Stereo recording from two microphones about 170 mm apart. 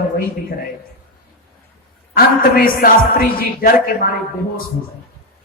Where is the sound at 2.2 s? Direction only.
60° left (ahead or behind).